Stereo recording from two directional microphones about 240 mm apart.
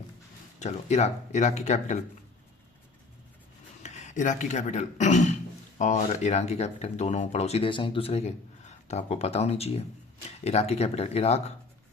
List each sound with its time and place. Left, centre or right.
0.6 s speech: left
3.8 s speech: left